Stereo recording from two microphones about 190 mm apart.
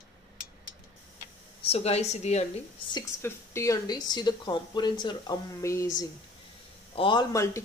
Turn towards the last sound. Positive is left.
turn(degrees=15)  # may be behind; listen again after turning